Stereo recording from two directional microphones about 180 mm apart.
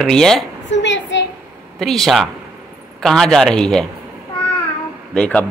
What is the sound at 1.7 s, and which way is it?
A man's voice, centre (ahead or behind).